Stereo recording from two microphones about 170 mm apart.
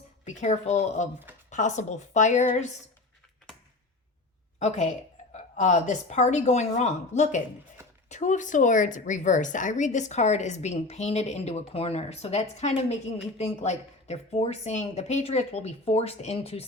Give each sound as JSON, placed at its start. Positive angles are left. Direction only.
{"t": 0.3, "sound": "a woman's voice", "side_deg": 45}
{"t": 4.6, "sound": "a woman's voice", "side_deg": 45}